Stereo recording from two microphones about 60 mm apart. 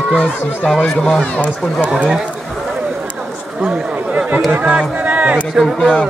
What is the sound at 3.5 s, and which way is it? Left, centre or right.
Speech, centre.